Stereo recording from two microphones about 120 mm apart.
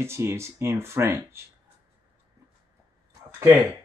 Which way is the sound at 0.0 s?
20° right (ahead or behind).